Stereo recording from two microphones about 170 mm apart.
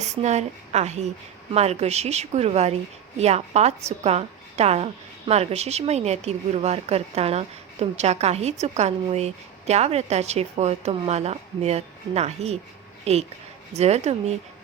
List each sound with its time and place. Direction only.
0.2 s a woman's voice: 40° right (ahead or behind)